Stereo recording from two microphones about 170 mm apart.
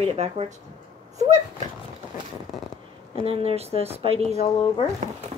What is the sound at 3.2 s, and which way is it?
Speech, 35° right (ahead or behind).